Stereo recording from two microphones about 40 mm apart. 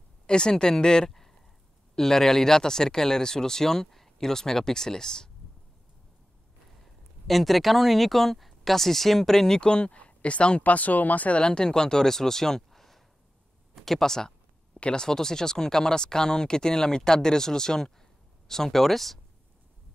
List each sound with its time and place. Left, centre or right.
0.3 s speech: left
6.8 s speech: centre
9.6 s speech: left
10.6 s speech: left
11.3 s speech: left
14.8 s speech: left
15.0 s speech: centre